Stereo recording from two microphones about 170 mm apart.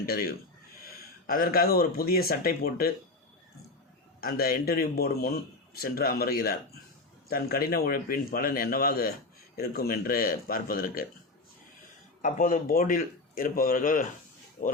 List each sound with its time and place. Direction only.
0.0 s speech: 65° left (ahead or behind)
4.2 s speech: 60° left (ahead or behind)
12.2 s a man's voice: 50° left (ahead or behind)